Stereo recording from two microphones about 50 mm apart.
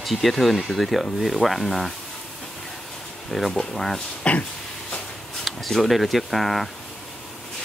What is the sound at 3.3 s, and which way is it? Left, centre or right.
Speech, centre.